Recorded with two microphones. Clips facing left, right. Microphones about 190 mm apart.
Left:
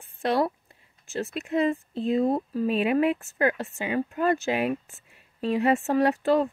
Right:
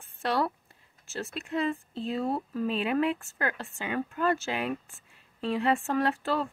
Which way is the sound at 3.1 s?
20° left (ahead or behind).